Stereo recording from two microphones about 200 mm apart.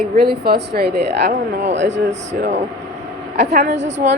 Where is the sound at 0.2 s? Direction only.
50° right (ahead or behind).